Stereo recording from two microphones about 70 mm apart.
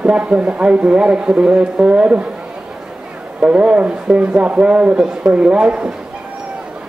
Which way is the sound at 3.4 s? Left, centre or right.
Centre.